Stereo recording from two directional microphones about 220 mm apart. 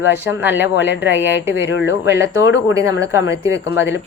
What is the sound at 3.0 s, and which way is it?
Speech, 15° right (ahead or behind).